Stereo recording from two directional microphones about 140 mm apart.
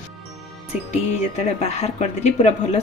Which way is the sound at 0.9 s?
50° left (ahead or behind).